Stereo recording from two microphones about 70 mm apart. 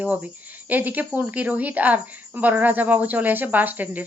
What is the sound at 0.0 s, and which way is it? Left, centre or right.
A woman's voice, right.